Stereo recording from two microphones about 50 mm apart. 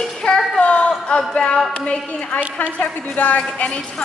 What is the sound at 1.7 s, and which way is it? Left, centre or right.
A woman's voice, left.